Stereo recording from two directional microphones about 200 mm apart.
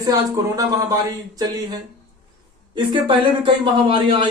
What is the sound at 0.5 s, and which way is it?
Speech, 15° right (ahead or behind).